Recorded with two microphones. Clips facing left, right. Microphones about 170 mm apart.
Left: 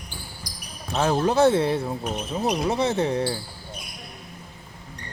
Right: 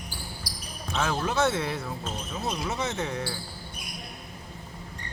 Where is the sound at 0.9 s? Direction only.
35° left (ahead or behind).